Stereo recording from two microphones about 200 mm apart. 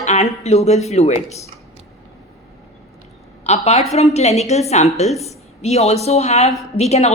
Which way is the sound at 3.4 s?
30° left (ahead or behind).